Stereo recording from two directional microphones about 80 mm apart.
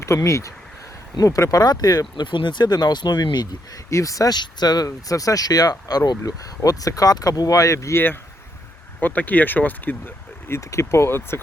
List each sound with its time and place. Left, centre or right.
0.0 s speech: left
3.8 s speech: left
4.4 s speech: left
4.9 s speech: left
9.0 s speech: centre
10.5 s speech: left